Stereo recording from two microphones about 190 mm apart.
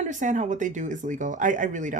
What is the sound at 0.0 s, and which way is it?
Speech, 40° right (ahead or behind).